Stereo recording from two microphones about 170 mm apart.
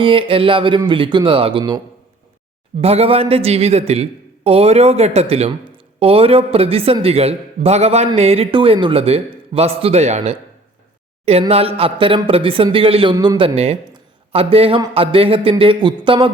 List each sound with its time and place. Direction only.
0.0 s speech: 30° right (ahead or behind)
2.8 s a man's voice: 35° right (ahead or behind)